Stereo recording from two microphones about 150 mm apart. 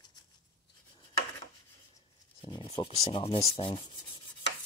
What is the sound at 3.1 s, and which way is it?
Speech, 40° left (ahead or behind).